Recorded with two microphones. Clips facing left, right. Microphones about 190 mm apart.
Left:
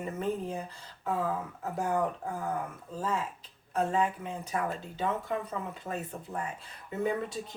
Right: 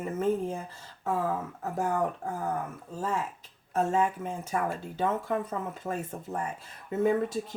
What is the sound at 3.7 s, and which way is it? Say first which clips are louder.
Speech: right 2 dB; 45° right (ahead or behind).